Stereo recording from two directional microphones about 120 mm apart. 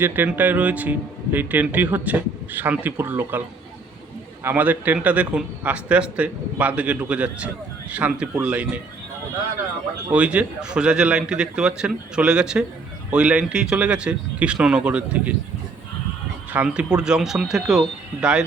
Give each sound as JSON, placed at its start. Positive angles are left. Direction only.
{"t": 0.0, "sound": "a man's voice", "side_deg": -15}
{"t": 4.4, "sound": "a man's voice", "side_deg": -15}
{"t": 10.1, "sound": "a man's voice", "side_deg": -10}
{"t": 16.5, "sound": "a man's voice", "side_deg": -10}